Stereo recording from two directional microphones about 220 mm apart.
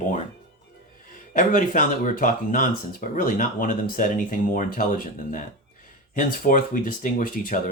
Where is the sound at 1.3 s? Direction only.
35° left (ahead or behind).